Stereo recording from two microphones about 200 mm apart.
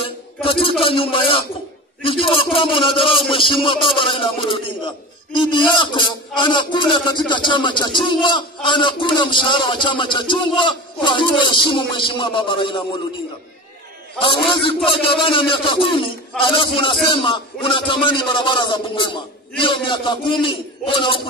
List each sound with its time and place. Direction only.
0.0 s a man's voice: 25° left (ahead or behind)
14.2 s a man's voice: 25° left (ahead or behind)